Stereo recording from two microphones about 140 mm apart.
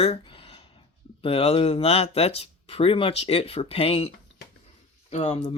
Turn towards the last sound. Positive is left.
turn(degrees=55)  # may be behind; listen again after turning